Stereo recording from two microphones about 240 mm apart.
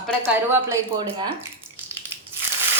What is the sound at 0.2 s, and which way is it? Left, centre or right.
A woman's voice, centre.